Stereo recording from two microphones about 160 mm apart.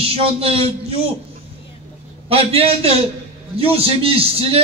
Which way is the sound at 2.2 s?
35° right (ahead or behind).